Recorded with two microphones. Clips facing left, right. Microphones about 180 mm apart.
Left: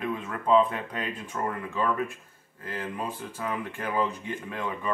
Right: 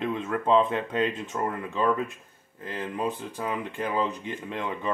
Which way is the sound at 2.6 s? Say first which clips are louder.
Right 3 dB; 20° right (ahead or behind).